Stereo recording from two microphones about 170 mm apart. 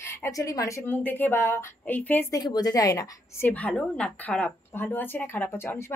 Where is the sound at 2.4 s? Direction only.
25° left (ahead or behind).